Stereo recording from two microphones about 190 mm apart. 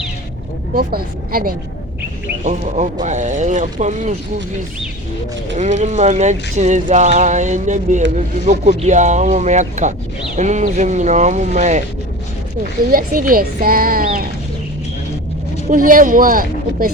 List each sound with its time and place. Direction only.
0.7 s speech: 50° right (ahead or behind)
2.4 s speech: 40° right (ahead or behind)
5.5 s speech: 40° right (ahead or behind)
12.9 s speech: 45° right (ahead or behind)
15.7 s speech: 45° right (ahead or behind)